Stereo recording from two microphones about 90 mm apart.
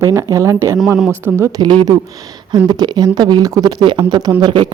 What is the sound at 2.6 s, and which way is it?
Speech, 50° right (ahead or behind).